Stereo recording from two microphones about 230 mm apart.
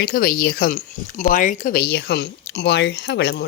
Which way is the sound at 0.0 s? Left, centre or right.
Left.